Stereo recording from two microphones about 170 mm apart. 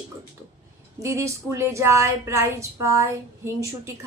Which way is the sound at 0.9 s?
15° right (ahead or behind).